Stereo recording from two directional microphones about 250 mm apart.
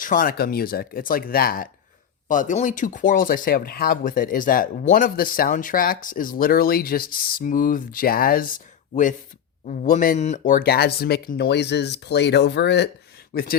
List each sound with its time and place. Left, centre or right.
0.0 s speech: left
9.6 s speech: left